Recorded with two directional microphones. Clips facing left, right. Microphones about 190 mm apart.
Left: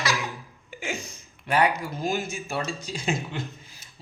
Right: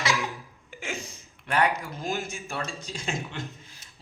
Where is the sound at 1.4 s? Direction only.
10° left (ahead or behind).